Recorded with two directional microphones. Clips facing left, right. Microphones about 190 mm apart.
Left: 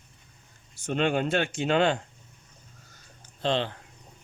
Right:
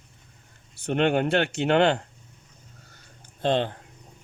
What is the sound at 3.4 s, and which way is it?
Speech, 50° right (ahead or behind).